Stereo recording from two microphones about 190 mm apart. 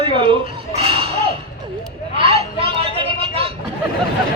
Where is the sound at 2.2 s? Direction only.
30° right (ahead or behind).